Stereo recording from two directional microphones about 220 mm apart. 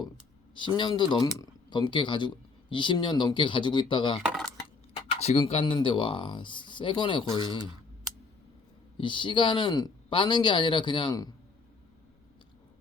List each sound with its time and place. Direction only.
0.5 s speech: 20° left (ahead or behind)
4.2 s coin: centre (ahead or behind)
5.2 s speech: 30° left (ahead or behind)
9.0 s speech: 20° left (ahead or behind)